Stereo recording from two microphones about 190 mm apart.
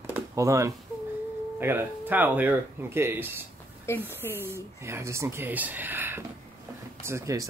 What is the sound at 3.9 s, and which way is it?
Speech, 15° left (ahead or behind).